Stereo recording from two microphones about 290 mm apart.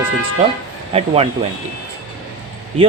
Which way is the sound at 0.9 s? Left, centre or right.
Centre.